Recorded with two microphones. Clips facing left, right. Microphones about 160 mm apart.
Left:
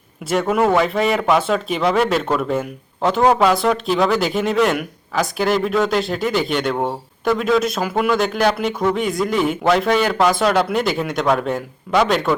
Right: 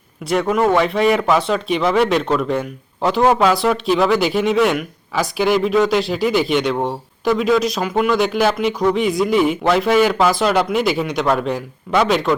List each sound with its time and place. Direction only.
0.3 s speech: 5° left (ahead or behind)